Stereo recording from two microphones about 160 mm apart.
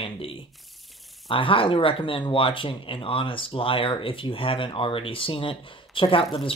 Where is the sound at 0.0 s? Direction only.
35° left (ahead or behind).